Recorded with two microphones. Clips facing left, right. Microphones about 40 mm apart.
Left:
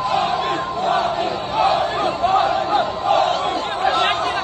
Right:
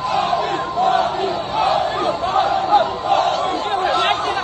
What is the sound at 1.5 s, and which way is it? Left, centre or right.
Battle cry, left.